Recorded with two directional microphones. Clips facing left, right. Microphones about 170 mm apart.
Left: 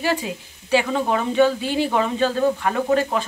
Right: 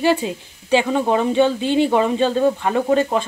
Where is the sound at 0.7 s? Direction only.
25° right (ahead or behind).